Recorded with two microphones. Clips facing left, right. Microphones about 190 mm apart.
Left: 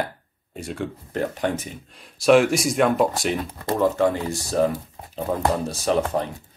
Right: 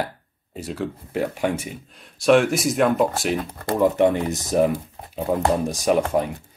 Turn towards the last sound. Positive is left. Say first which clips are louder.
# right 2 dB
turn(degrees=-10)  # may be behind; listen again after turning